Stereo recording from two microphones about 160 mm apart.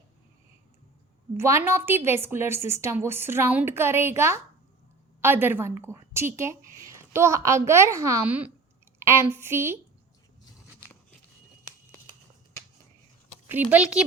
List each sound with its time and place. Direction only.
1.4 s a woman's voice: 15° right (ahead or behind)
13.5 s a woman's voice: 10° right (ahead or behind)